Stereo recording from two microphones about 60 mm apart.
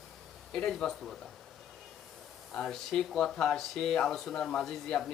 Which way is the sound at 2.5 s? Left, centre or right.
Centre.